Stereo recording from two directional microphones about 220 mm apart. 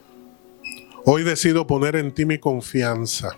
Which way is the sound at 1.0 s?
20° left (ahead or behind).